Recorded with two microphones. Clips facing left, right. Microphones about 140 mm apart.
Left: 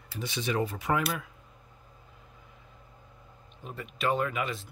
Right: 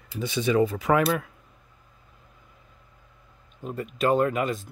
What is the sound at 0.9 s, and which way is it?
Speech, 70° right (ahead or behind).